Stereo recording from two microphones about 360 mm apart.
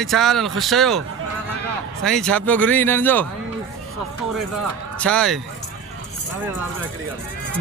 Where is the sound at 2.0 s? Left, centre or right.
Centre.